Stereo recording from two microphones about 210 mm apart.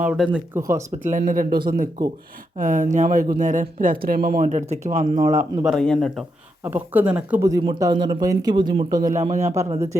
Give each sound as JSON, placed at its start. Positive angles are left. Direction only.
{"t": 0.0, "sound": "speech", "side_deg": -5}
{"t": 1.0, "sound": "speech", "side_deg": -40}
{"t": 5.6, "sound": "speech", "side_deg": 0}
{"t": 6.7, "sound": "speech", "side_deg": -10}